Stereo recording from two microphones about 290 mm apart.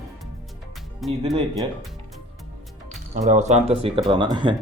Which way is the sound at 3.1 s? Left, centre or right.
Right.